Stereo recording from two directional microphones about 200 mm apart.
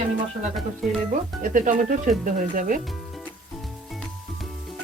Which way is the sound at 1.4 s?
40° right (ahead or behind).